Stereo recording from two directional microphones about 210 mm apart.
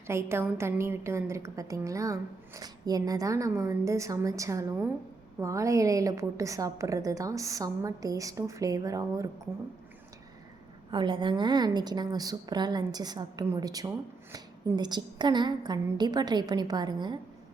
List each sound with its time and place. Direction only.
0.1 s a woman's voice: 10° right (ahead or behind)
10.9 s a woman's voice: 20° right (ahead or behind)